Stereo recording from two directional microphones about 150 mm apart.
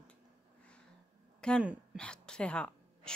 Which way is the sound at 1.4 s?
5° left (ahead or behind).